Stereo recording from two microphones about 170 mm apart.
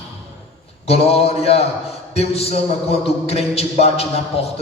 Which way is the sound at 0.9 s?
35° left (ahead or behind).